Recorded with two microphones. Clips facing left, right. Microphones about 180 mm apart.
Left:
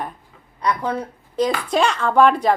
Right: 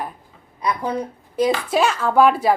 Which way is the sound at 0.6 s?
10° right (ahead or behind).